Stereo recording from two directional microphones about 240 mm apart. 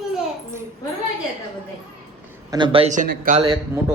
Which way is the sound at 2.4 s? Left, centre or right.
Centre.